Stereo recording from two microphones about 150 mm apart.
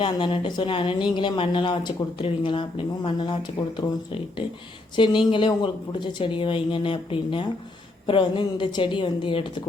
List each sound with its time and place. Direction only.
0.0 s a woman's voice: 35° left (ahead or behind)